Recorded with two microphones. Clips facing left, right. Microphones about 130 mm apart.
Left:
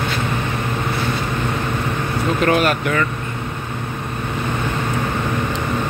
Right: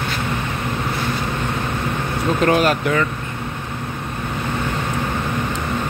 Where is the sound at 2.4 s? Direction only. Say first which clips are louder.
Right 1 dB; 30° right (ahead or behind).